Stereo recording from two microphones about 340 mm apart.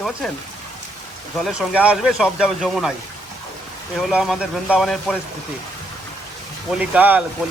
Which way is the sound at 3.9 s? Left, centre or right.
Centre.